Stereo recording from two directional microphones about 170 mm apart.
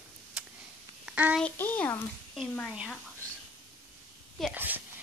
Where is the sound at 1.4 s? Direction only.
10° left (ahead or behind).